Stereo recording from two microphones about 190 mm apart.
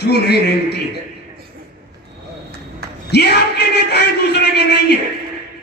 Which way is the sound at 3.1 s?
60° left (ahead or behind).